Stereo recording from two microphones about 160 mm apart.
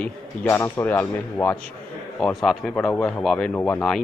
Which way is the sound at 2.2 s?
Centre (ahead or behind).